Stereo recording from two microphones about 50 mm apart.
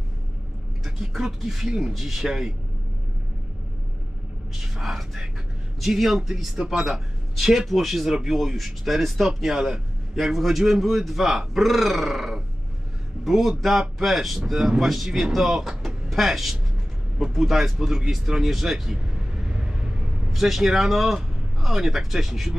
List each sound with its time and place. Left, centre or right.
0.8 s a man's voice: centre
4.6 s a sound: centre
5.8 s a man's voice: centre
15.8 s a sound: centre
17.2 s a man's voice: centre
19.4 s vehicle: centre
20.2 s speech: centre